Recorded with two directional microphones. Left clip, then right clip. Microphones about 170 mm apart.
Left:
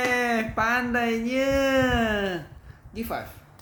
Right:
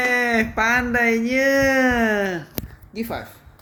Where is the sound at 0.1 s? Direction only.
20° right (ahead or behind).